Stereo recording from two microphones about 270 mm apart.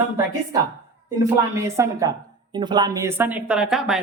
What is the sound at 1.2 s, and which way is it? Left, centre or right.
A woman's voice, centre.